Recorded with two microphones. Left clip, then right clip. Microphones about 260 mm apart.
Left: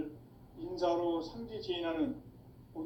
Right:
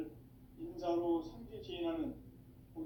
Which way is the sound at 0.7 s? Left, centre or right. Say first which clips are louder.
Left 4 dB; left.